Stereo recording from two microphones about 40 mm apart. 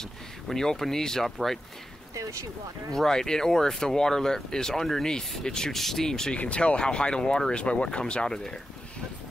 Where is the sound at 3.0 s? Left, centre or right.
Centre.